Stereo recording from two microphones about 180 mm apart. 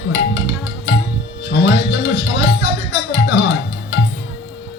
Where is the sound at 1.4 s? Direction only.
70° left (ahead or behind).